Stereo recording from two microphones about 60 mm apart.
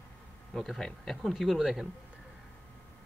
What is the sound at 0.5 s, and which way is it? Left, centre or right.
Speech, centre.